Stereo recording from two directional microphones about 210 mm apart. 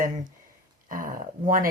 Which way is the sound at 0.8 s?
40° right (ahead or behind).